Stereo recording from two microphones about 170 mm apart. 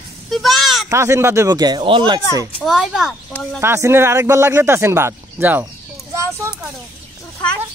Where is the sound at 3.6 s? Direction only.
15° right (ahead or behind).